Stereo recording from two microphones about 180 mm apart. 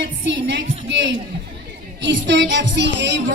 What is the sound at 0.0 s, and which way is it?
Music, 80° right.